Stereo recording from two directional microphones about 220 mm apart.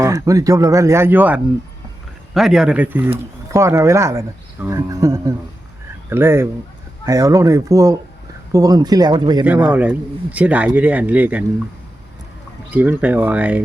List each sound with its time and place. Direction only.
0.0 s speech: 15° right (ahead or behind)
9.4 s speech: 5° right (ahead or behind)
12.7 s speech: 5° right (ahead or behind)